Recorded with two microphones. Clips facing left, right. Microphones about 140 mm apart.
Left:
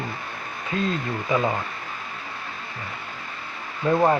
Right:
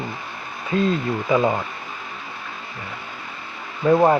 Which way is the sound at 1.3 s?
20° right (ahead or behind).